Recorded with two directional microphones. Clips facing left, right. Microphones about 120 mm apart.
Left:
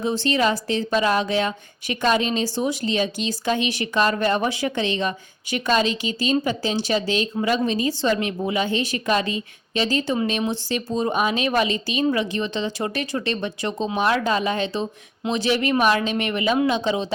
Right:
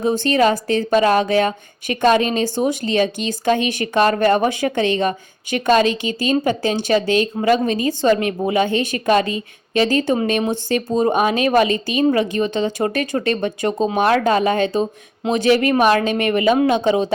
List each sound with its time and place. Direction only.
0.0 s a woman's voice: 45° right (ahead or behind)
14.0 s a woman's voice: 55° right (ahead or behind)